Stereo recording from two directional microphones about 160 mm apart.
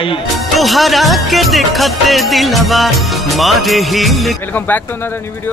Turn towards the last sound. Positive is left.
turn(degrees=0)  # may be behind; listen again after turning